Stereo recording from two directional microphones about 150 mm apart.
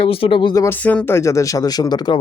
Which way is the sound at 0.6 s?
10° left (ahead or behind).